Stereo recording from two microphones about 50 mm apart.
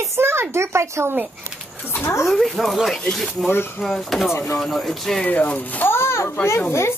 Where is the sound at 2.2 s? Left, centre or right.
Centre.